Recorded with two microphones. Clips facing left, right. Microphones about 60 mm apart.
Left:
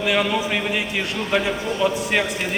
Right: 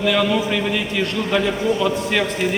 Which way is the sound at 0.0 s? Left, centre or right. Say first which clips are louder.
Right 2 dB; centre.